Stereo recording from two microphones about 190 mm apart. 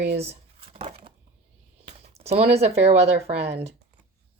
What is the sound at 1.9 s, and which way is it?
Speech, 35° right (ahead or behind).